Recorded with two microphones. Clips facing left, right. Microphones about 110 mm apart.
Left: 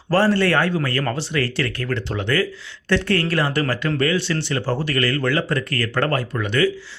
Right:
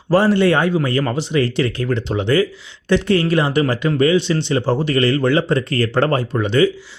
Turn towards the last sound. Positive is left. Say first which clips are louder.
# right 5 dB
turn(degrees=-25)  # may be behind; listen again after turning